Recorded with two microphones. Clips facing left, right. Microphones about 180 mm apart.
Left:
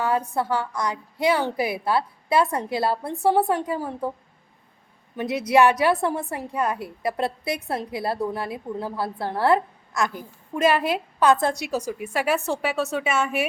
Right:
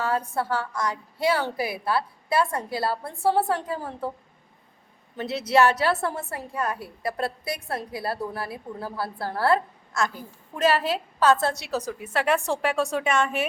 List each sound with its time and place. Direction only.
0.0 s a woman's voice: 15° left (ahead or behind)
5.1 s a woman's voice: 15° left (ahead or behind)